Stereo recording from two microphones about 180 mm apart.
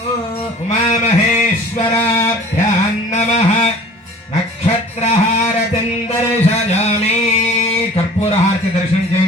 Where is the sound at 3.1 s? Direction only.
40° left (ahead or behind).